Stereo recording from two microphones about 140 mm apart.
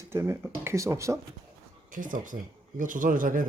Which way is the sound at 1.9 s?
70° right (ahead or behind).